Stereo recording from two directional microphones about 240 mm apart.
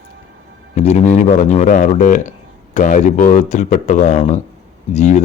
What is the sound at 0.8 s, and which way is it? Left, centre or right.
Speech, left.